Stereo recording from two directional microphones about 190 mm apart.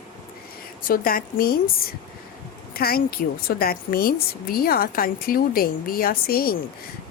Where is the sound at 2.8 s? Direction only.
55° left (ahead or behind).